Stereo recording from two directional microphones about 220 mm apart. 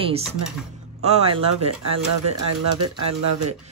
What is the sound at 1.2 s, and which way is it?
Speech, 25° right (ahead or behind).